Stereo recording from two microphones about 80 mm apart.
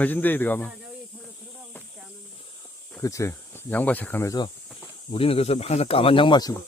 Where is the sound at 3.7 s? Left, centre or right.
Left.